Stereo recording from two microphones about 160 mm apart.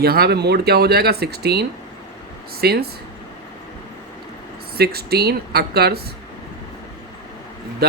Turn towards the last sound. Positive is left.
turn(degrees=-80)